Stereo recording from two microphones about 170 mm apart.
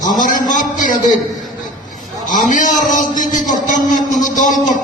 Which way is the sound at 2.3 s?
50° left (ahead or behind).